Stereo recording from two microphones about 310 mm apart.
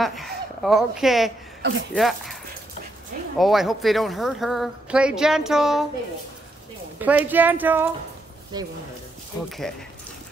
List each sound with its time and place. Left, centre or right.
0.0 s speech: centre
1.6 s speech: right
2.0 s speech: centre
3.3 s speech: centre
7.0 s speech: centre